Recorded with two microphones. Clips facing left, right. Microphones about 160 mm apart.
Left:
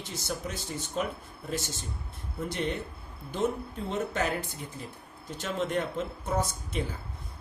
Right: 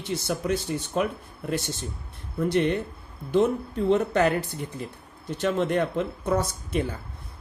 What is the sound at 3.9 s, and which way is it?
Speech, 65° right (ahead or behind).